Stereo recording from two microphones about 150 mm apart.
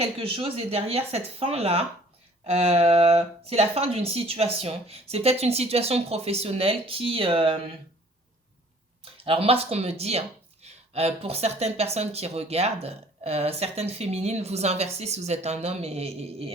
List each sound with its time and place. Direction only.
0.0 s speech: 40° right (ahead or behind)
9.1 s speech: 40° right (ahead or behind)